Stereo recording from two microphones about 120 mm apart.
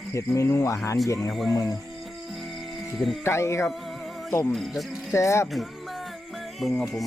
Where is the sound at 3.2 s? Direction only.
25° left (ahead or behind).